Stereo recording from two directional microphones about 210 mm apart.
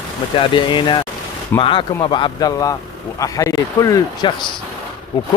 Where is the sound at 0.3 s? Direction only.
25° left (ahead or behind).